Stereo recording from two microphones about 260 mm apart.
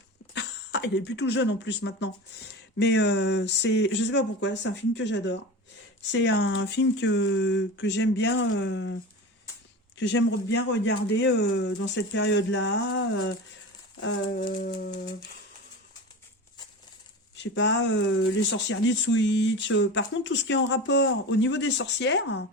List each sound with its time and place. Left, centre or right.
0.3 s speech: left
10.0 s speech: left
14.3 s a sound: left
17.3 s speech: left